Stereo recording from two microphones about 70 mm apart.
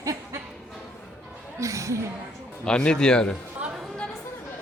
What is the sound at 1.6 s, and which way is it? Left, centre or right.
Speech, right.